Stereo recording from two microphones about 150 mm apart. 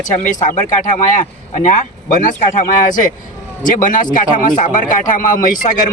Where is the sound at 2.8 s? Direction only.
60° left (ahead or behind).